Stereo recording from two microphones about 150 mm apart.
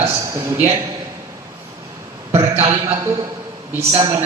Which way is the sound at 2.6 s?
20° right (ahead or behind).